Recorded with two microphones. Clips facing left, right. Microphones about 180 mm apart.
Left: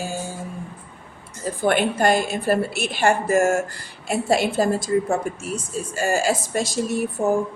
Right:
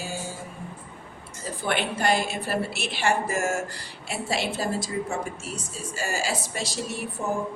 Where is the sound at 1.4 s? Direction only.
45° left (ahead or behind).